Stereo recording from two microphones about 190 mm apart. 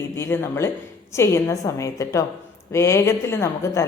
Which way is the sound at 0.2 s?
15° left (ahead or behind).